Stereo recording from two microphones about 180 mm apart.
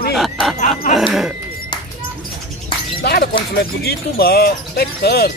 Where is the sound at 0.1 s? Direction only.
Centre (ahead or behind).